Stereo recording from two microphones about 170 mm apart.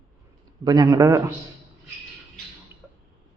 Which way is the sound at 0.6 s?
25° right (ahead or behind).